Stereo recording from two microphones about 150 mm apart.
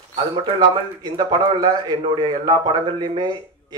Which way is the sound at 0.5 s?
30° right (ahead or behind).